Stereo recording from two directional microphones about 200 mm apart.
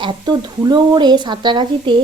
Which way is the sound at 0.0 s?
25° right (ahead or behind).